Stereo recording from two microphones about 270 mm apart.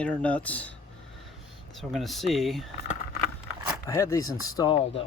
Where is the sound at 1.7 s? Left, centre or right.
Centre.